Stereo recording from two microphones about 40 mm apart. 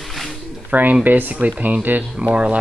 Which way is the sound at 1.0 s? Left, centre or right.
Right.